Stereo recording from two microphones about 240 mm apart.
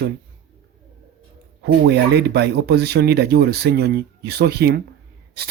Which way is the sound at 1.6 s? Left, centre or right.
Right.